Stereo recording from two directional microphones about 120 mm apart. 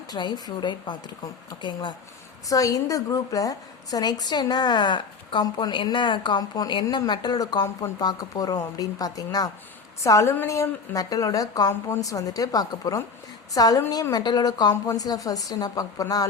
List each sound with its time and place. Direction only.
0.1 s a woman's voice: 35° left (ahead or behind)